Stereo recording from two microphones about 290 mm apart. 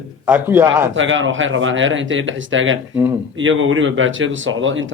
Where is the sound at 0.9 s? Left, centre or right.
Right.